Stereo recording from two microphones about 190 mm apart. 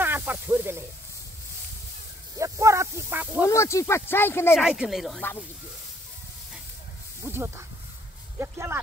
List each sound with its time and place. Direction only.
0.0 s snake: 10° right (ahead or behind)
2.3 s snake: 15° right (ahead or behind)
3.4 s speech: 15° left (ahead or behind)
4.6 s speech: centre (ahead or behind)
7.2 s speech: 10° right (ahead or behind)